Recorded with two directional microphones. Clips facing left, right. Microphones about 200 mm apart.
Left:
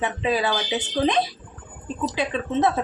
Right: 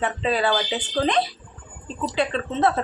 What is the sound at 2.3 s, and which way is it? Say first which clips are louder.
Speech: even; 10° left (ahead or behind).